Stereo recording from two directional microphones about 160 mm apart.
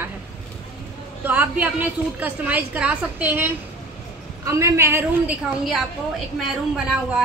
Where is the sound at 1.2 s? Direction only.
10° right (ahead or behind).